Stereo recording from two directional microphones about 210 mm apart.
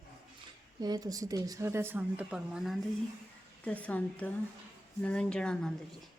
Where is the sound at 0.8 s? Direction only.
20° right (ahead or behind); by 5.7 s 5° left (ahead or behind).